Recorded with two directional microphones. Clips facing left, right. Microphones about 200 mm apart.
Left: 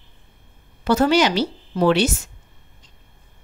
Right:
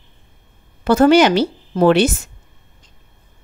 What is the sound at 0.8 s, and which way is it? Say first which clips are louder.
A woman's voice: right 6 dB; 50° right (ahead or behind).